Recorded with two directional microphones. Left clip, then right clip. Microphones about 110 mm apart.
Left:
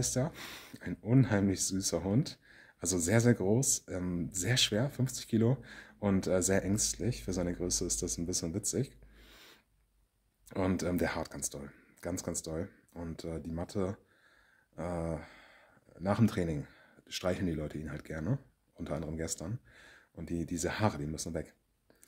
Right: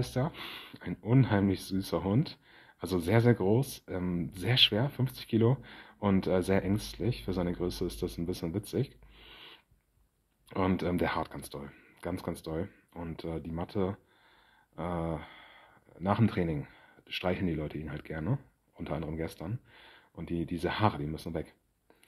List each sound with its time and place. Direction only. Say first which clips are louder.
0.0 s speech: even; 40° left (ahead or behind); by 12.2 s 25° left (ahead or behind)
12.2 s speech: right 2 dB; 35° left (ahead or behind)